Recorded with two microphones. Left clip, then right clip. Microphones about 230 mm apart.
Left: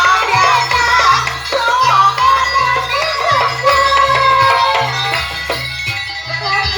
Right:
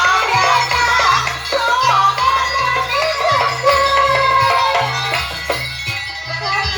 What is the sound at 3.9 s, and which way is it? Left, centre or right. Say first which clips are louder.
Music: left 2 dB; left.